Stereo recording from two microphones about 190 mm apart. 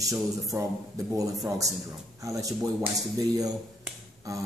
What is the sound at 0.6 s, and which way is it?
Speech, 15° right (ahead or behind).